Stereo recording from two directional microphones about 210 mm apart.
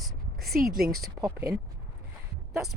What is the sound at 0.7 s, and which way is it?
Speech, 45° right (ahead or behind).